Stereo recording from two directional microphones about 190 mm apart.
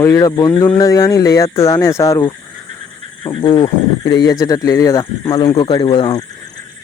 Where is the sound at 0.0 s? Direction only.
15° left (ahead or behind).